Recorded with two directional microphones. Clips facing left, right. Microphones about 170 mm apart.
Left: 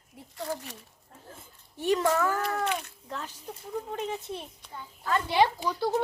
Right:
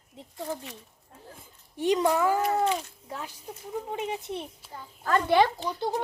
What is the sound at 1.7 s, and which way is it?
A child's voice, 15° right (ahead or behind).